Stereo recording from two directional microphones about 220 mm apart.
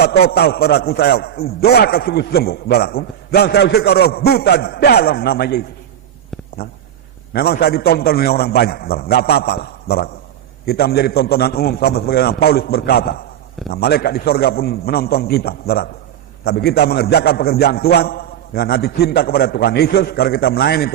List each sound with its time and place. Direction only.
0.0 s a man's voice: 45° left (ahead or behind)